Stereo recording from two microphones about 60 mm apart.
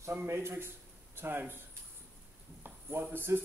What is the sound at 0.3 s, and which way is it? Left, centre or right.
A man's voice, right.